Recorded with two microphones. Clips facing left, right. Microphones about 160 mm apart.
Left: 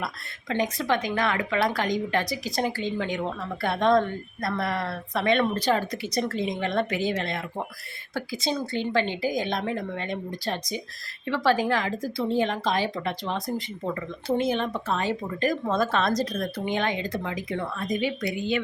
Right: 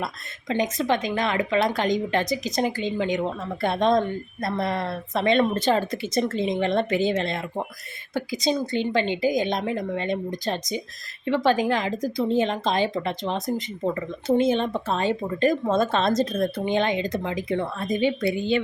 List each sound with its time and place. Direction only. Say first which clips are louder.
0.0 s a woman's voice: right 2 dB; 20° right (ahead or behind)